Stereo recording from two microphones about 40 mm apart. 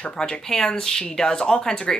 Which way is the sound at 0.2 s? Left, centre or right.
Centre.